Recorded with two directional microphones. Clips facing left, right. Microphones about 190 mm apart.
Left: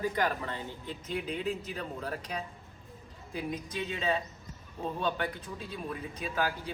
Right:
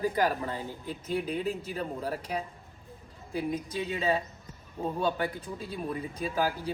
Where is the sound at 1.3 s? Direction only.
40° right (ahead or behind).